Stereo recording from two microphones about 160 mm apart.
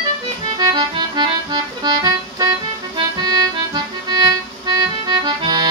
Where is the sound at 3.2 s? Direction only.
25° right (ahead or behind).